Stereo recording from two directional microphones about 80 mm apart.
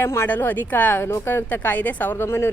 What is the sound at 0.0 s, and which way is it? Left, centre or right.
Speech, left.